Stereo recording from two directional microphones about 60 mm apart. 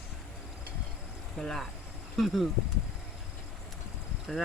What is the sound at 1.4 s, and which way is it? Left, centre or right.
Speech, centre.